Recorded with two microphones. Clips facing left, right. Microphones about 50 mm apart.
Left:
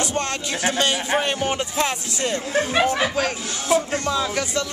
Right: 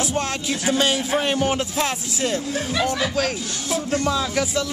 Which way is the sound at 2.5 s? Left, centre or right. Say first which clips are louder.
Left 4 dB; left.